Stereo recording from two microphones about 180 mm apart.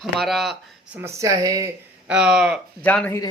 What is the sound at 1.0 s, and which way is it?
Speech, 15° right (ahead or behind).